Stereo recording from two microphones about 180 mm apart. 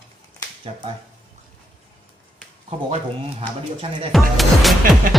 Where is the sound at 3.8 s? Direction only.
35° right (ahead or behind).